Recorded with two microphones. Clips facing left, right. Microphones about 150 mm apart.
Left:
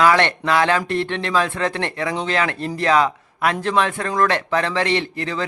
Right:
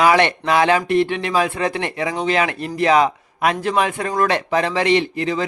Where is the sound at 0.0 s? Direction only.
15° right (ahead or behind).